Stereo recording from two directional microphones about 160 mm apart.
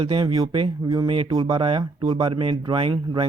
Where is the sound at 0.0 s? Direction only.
35° right (ahead or behind).